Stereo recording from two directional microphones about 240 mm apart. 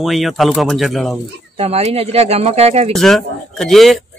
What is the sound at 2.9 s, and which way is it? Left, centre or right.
A man's voice, centre.